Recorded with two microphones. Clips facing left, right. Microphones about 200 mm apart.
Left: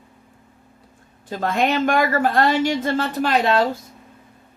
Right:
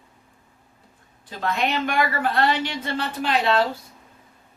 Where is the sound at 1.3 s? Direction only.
45° left (ahead or behind).